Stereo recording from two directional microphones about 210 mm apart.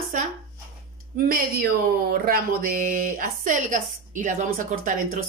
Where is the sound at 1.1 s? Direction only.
45° right (ahead or behind).